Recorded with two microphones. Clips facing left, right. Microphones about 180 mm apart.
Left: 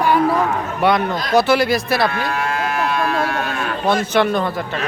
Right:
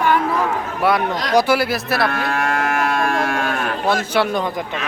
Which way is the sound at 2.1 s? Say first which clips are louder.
Right 1 dB; 50° right (ahead or behind).